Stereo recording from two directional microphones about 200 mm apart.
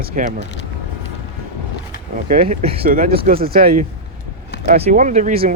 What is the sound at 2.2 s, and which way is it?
Speech, 40° right (ahead or behind).